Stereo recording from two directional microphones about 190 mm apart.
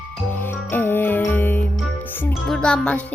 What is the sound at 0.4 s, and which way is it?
Music, 10° left (ahead or behind).